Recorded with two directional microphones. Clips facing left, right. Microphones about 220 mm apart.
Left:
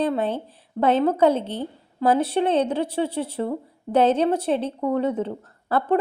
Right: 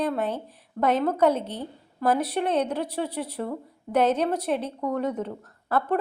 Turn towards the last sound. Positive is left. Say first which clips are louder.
# left 4 dB
turn(degrees=30)  # may be behind; listen again after turning